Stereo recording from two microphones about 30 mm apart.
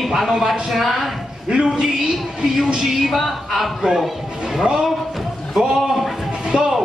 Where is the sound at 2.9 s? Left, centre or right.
Centre.